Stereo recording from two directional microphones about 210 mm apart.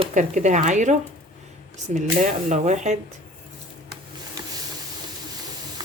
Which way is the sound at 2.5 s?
35° right (ahead or behind).